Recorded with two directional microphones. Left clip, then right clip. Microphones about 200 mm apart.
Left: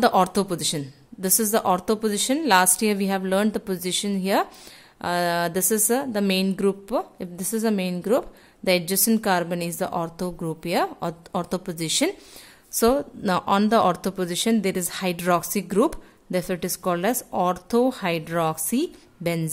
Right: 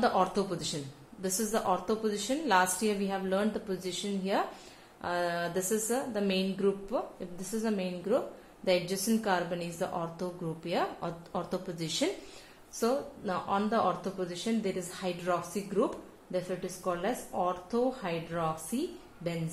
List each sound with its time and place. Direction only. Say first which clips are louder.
0.0 s a woman's voice: left 8 dB; 40° left (ahead or behind)